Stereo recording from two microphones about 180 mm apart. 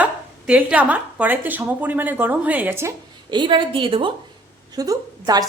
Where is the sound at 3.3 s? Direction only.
25° right (ahead or behind).